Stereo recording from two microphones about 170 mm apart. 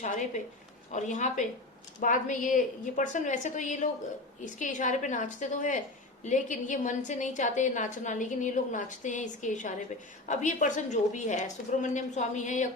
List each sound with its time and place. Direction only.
0.0 s a woman's voice: 45° left (ahead or behind)